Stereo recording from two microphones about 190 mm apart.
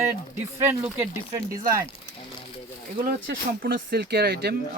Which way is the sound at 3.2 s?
55° right (ahead or behind).